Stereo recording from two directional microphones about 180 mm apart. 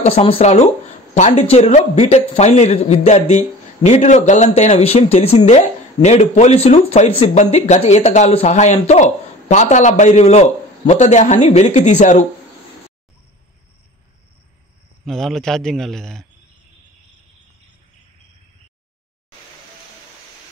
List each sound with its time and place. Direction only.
0.0 s speech: 35° left (ahead or behind)
15.0 s speech: centre (ahead or behind)